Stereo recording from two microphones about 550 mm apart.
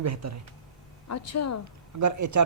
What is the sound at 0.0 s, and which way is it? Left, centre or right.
Speech, right.